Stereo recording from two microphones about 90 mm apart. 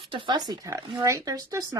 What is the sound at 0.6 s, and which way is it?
Speech, 35° right (ahead or behind).